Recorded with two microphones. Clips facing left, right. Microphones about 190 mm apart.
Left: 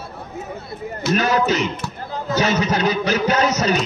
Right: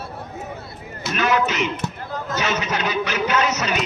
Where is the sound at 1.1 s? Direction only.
35° left (ahead or behind).